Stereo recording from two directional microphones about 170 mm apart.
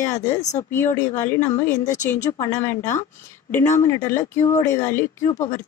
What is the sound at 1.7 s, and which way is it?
Speech, 45° left (ahead or behind).